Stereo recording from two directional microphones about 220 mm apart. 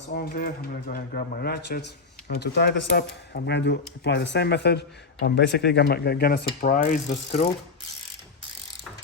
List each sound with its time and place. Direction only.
0.1 s speech: 45° left (ahead or behind)